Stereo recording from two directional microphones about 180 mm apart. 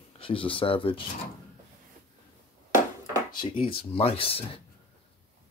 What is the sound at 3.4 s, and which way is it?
Speech, 30° left (ahead or behind).